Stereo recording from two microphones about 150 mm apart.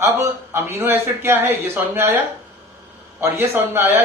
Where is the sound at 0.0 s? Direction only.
20° right (ahead or behind).